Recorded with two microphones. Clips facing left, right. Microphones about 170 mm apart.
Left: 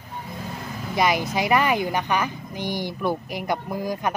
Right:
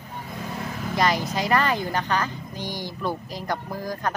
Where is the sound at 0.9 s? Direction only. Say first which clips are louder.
Left 2 dB; 15° left (ahead or behind).